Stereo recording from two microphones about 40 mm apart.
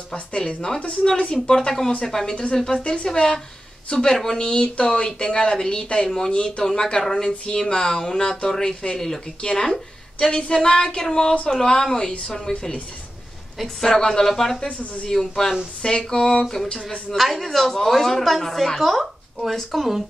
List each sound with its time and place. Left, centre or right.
0.1 s speech: left
2.8 s speech: left
6.6 s speech: centre
13.7 s speech: centre
14.7 s speech: left
15.0 s speech: centre
17.1 s speech: centre